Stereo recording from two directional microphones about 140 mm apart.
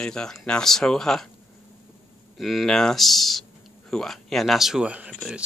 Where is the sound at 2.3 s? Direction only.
Centre (ahead or behind).